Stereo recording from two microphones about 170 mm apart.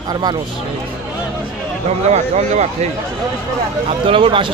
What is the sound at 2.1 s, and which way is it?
Speech, 40° right (ahead or behind).